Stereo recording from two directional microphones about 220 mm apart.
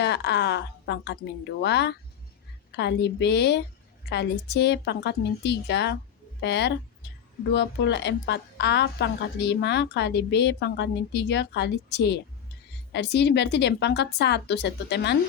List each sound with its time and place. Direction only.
0.0 s a woman's voice: 50° left (ahead or behind)